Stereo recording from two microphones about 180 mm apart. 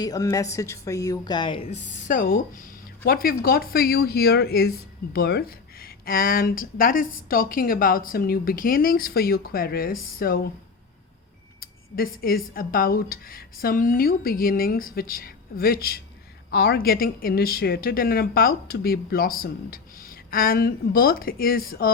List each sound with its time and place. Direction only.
0.0 s a woman's voice: 20° left (ahead or behind); by 10.5 s 55° left (ahead or behind)
11.6 s a sound: 55° left (ahead or behind)
12.5 s a woman's voice: 55° left (ahead or behind)